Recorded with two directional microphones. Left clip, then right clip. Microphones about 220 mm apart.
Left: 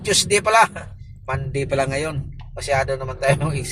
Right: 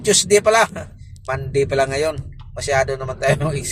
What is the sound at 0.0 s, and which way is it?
Speech, 25° right (ahead or behind).